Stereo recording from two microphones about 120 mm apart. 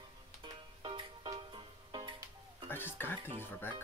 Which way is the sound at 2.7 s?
15° left (ahead or behind).